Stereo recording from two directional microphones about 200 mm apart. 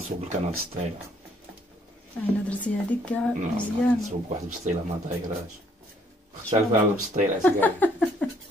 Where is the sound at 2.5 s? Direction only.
5° left (ahead or behind).